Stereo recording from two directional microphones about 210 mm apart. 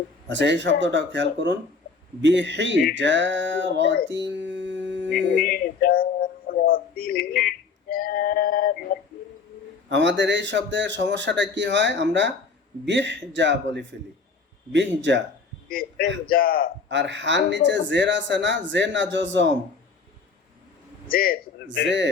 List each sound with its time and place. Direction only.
0.3 s speech: 60° right (ahead or behind)
4.1 s a sound: 55° right (ahead or behind)
5.5 s a sound: 45° left (ahead or behind)
9.9 s speech: 60° right (ahead or behind)
15.7 s a man's voice: 45° left (ahead or behind)
16.9 s speech: 60° right (ahead or behind)
21.1 s a man's voice: 45° left (ahead or behind)
21.8 s speech: 60° right (ahead or behind)